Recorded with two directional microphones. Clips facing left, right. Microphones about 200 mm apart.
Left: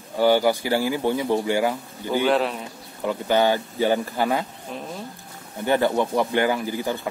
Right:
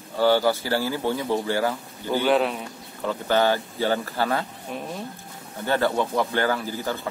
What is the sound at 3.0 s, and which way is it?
Speech, 15° left (ahead or behind).